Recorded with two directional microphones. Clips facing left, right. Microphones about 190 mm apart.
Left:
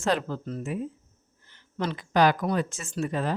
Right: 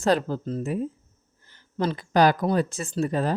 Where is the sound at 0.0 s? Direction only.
35° right (ahead or behind).